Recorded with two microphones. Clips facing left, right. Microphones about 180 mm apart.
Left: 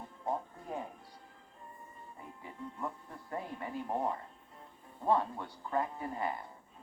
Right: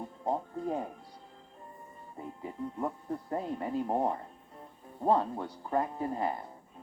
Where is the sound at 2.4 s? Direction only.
45° right (ahead or behind).